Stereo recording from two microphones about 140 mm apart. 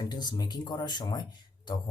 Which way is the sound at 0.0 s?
30° left (ahead or behind).